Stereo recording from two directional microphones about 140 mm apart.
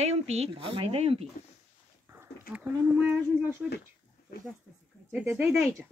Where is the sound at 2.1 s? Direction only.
15° right (ahead or behind).